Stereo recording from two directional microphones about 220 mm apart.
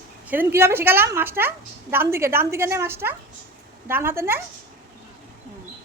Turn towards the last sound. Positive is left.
turn(degrees=-10)  # may be behind; listen again after turning